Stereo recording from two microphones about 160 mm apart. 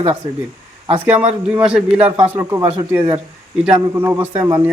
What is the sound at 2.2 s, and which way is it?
Speech, 20° right (ahead or behind).